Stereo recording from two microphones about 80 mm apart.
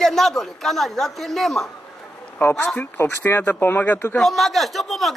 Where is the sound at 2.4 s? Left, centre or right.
Left.